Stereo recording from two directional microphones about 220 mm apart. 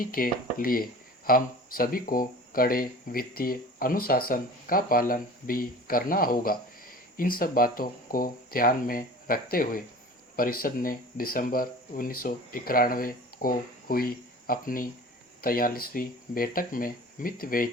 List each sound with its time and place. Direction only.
0.0 s speech: 40° left (ahead or behind)